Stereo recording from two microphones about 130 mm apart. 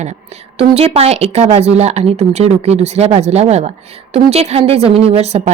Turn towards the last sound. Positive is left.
turn(degrees=-55)  # may be behind; listen again after turning